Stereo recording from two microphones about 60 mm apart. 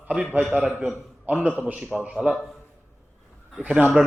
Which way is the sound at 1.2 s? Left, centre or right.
Right.